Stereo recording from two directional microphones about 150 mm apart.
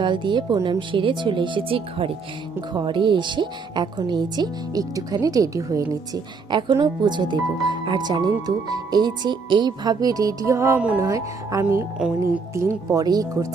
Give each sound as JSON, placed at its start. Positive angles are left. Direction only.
{"t": 0.0, "sound": "a woman's voice", "side_deg": -30}